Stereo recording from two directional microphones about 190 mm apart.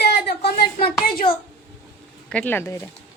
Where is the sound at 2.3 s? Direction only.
10° left (ahead or behind).